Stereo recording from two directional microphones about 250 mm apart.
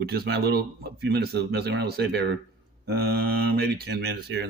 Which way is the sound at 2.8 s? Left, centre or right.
Right.